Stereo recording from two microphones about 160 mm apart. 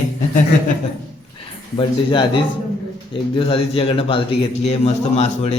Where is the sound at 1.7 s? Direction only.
30° left (ahead or behind).